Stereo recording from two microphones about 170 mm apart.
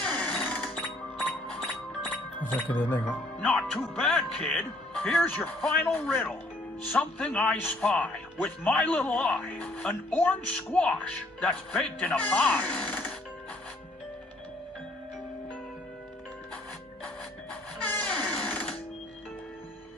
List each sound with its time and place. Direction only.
0.0 s music: 10° left (ahead or behind)
6.9 s speech: 5° left (ahead or behind)
17.8 s music: 10° left (ahead or behind)